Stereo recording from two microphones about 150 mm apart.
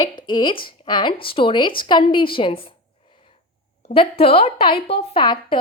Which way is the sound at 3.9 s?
35° left (ahead or behind).